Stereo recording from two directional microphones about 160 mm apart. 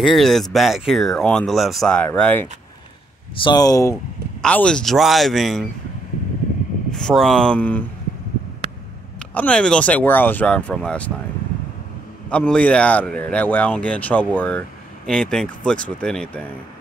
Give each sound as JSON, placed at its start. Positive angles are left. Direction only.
{"t": 0.0, "sound": "speech", "side_deg": 0}
{"t": 3.3, "sound": "speech", "side_deg": 25}
{"t": 4.4, "sound": "speech", "side_deg": 5}
{"t": 6.9, "sound": "speech", "side_deg": 5}
{"t": 9.3, "sound": "speech", "side_deg": 10}
{"t": 12.3, "sound": "speech", "side_deg": 10}